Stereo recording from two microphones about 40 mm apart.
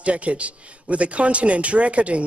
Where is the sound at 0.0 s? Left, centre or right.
Right.